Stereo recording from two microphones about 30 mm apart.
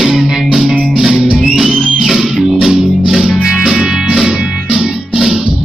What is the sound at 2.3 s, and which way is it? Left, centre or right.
Music, centre.